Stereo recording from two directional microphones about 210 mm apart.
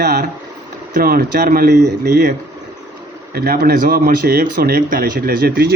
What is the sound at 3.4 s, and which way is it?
Speech, 45° right (ahead or behind).